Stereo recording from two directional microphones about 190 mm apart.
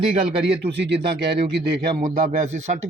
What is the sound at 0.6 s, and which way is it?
Speech, 65° right (ahead or behind).